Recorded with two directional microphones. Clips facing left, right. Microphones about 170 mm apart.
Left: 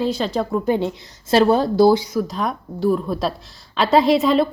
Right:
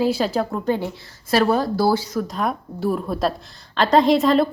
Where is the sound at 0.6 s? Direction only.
15° left (ahead or behind); by 4.5 s centre (ahead or behind).